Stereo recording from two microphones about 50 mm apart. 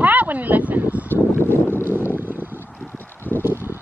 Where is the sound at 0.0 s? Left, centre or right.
Right.